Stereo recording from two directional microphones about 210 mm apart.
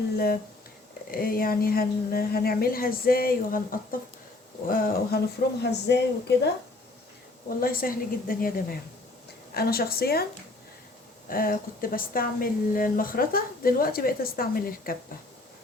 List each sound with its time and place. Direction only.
1.1 s a woman's voice: 45° left (ahead or behind)
7.6 s a woman's voice: 45° left (ahead or behind)
11.3 s a woman's voice: 45° left (ahead or behind)